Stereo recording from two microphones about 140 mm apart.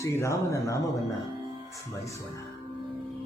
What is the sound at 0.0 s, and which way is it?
Music, 20° left (ahead or behind).